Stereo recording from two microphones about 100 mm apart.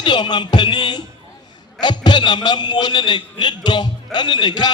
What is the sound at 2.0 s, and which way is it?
A man's voice, 45° left (ahead or behind).